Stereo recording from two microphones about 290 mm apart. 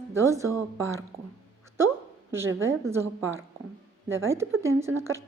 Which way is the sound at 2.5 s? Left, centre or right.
Centre.